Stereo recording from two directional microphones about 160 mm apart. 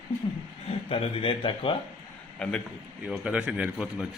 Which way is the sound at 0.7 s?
35° left (ahead or behind).